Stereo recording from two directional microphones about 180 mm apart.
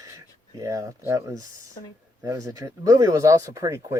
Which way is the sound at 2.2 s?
15° right (ahead or behind).